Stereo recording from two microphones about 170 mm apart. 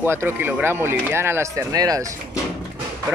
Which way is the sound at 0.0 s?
15° right (ahead or behind).